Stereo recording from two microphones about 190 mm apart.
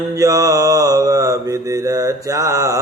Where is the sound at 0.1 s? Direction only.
20° right (ahead or behind).